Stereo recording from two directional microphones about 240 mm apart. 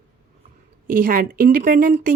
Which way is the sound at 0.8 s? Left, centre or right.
Right.